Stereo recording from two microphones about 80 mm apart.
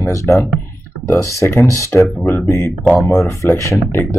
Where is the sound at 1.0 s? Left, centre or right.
Left.